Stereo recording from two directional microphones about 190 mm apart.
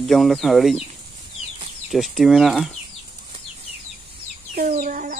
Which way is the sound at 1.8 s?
Centre (ahead or behind).